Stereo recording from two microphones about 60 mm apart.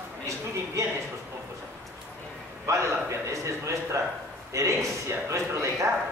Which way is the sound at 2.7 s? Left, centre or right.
Right.